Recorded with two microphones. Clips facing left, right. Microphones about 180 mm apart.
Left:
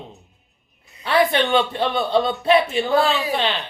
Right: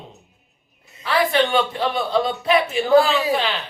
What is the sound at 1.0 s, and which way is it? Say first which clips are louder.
A man's voice: left 1 dB; 25° left (ahead or behind).